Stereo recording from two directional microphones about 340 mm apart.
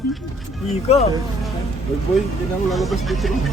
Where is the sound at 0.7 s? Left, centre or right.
Centre.